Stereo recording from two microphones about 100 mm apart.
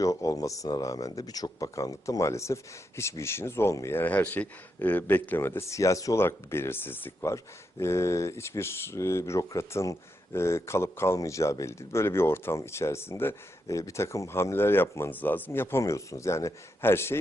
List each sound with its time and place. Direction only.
0.0 s speech: 35° left (ahead or behind)